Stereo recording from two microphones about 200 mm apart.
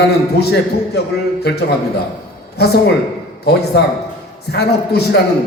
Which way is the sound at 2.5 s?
55° left (ahead or behind).